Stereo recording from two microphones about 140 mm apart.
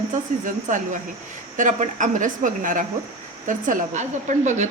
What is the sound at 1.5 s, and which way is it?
A woman's voice, 65° right (ahead or behind).